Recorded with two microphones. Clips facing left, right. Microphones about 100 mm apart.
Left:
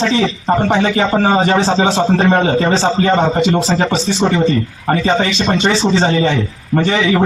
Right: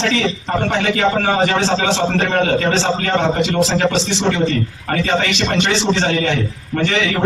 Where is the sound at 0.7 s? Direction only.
20° left (ahead or behind).